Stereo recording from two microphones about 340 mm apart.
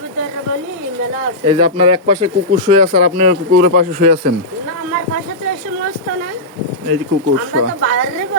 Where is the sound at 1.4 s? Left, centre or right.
Centre.